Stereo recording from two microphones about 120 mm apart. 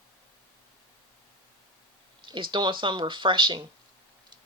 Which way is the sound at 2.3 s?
40° right (ahead or behind).